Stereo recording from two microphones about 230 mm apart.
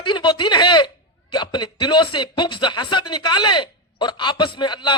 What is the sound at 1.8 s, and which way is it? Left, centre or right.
A man's voice, centre.